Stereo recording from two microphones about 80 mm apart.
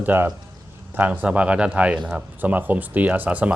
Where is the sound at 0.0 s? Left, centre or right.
Right.